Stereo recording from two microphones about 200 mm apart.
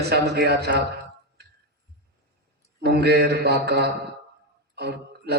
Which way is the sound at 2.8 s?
55° right (ahead or behind).